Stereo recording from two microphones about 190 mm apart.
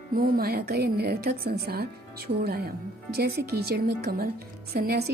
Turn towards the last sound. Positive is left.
turn(degrees=-55)  # may be behind; listen again after turning